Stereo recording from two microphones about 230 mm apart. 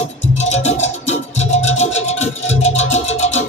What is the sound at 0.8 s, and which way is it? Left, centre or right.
Music, left.